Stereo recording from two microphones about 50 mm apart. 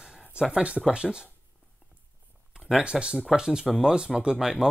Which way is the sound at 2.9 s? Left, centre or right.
Centre.